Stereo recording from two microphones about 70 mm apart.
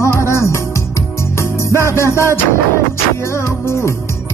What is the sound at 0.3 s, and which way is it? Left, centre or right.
Music, left.